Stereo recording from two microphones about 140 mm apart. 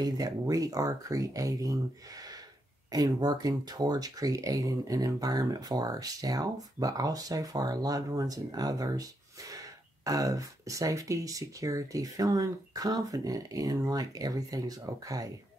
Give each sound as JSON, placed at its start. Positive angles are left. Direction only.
{"t": 0.0, "sound": "speech", "side_deg": -25}